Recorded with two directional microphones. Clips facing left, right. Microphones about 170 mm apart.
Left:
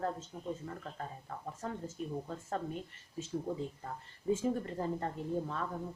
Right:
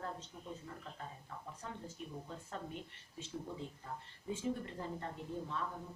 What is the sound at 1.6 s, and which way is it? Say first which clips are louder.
Speech: left 9 dB; 45° left (ahead or behind).